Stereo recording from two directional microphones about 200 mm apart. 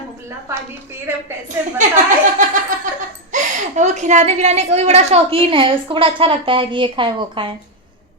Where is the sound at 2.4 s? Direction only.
40° right (ahead or behind).